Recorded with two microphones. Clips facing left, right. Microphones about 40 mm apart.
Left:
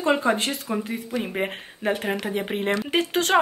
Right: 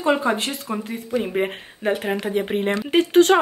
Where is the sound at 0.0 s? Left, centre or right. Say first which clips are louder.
Right 1 dB; centre.